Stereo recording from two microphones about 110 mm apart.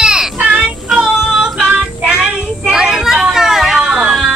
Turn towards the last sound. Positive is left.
turn(degrees=-10)  # may be behind; listen again after turning